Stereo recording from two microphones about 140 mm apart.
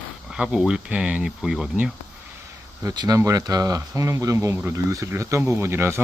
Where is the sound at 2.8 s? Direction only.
30° right (ahead or behind).